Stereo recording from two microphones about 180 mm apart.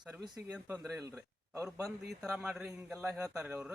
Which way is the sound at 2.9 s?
15° right (ahead or behind).